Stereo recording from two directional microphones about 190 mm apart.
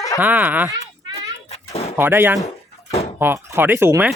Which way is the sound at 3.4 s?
10° right (ahead or behind).